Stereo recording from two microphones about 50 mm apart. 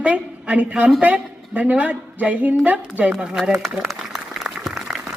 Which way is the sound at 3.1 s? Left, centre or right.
Centre.